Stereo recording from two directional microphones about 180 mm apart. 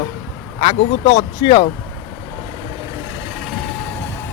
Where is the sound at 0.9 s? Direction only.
25° left (ahead or behind).